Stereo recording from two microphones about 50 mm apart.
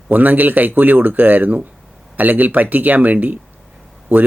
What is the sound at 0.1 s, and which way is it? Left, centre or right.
Speech, right.